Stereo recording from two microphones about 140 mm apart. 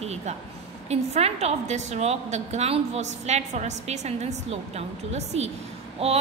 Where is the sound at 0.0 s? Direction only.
50° right (ahead or behind).